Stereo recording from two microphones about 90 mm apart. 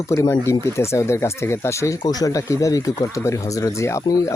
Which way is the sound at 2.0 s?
45° left (ahead or behind).